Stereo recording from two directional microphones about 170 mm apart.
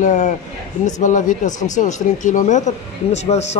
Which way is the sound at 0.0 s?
45° left (ahead or behind).